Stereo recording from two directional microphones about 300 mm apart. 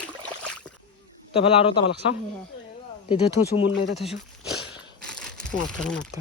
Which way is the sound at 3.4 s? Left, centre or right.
Left.